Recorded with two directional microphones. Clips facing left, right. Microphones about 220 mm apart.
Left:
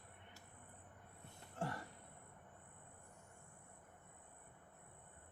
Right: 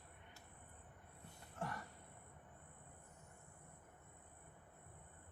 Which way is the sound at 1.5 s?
30° left (ahead or behind).